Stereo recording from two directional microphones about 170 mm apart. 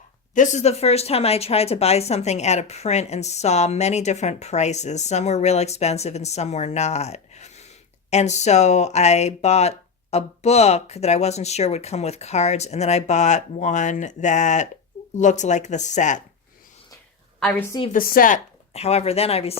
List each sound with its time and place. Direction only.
0.3 s speech: 45° left (ahead or behind)
17.4 s a woman's voice: 10° left (ahead or behind)
17.9 s a woman's voice: 55° left (ahead or behind)
18.7 s speech: 40° left (ahead or behind)